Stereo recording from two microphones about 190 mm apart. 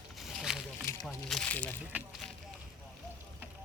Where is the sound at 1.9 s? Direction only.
10° right (ahead or behind).